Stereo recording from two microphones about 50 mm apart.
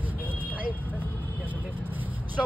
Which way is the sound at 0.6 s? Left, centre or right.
Right.